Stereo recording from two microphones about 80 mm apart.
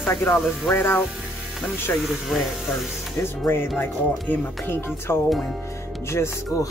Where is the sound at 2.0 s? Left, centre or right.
Centre.